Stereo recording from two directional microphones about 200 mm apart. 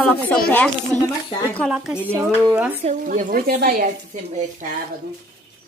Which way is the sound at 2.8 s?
40° right (ahead or behind).